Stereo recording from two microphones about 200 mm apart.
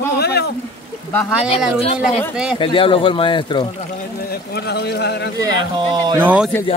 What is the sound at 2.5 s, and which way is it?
Speech, 25° left (ahead or behind).